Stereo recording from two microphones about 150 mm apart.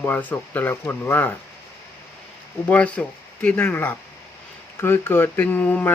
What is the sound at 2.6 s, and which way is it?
Speech, 10° left (ahead or behind).